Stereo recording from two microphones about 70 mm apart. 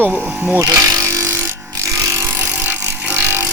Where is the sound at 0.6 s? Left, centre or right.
Right.